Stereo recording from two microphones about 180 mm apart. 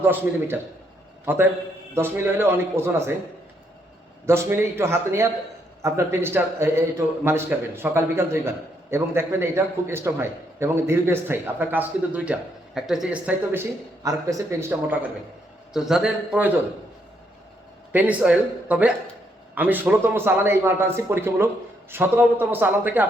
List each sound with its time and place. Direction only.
0.0 s a man's voice: 10° right (ahead or behind)
4.3 s a man's voice: 15° right (ahead or behind)
15.7 s a man's voice: 5° right (ahead or behind)
17.9 s a man's voice: 10° right (ahead or behind)